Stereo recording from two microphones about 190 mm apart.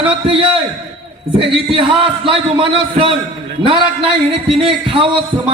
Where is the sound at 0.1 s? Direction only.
30° right (ahead or behind).